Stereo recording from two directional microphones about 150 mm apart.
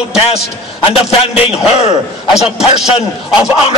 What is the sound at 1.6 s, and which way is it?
Speech, 45° left (ahead or behind).